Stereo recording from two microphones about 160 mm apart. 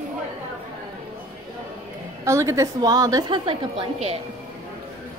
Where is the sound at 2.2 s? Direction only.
20° right (ahead or behind).